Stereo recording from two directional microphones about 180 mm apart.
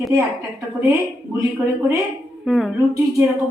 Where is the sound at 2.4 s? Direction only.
Centre (ahead or behind).